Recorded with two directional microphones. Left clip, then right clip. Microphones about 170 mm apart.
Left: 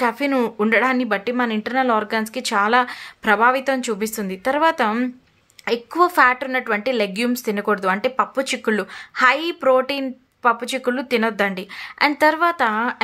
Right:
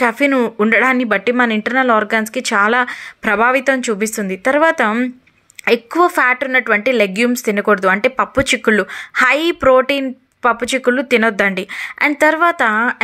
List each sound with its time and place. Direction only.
0.0 s a woman's voice: 15° right (ahead or behind)